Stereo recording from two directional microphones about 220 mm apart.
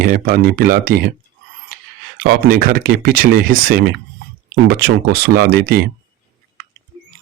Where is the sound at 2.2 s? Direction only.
40° right (ahead or behind).